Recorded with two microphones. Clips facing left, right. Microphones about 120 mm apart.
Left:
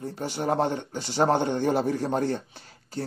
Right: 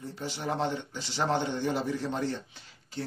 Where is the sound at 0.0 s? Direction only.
45° left (ahead or behind).